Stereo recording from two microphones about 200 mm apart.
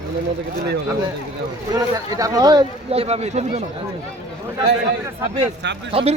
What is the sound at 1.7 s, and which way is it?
Speech, 15° right (ahead or behind).